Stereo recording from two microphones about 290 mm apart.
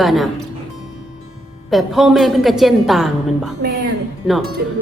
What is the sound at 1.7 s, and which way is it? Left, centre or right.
A woman's voice, centre.